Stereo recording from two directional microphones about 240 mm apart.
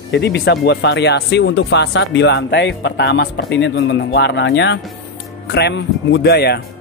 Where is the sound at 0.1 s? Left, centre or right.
Left.